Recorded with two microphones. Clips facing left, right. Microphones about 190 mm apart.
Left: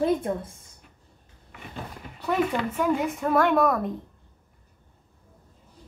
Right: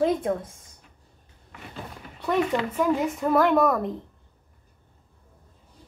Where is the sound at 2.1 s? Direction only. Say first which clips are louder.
Right 1 dB; 5° left (ahead or behind).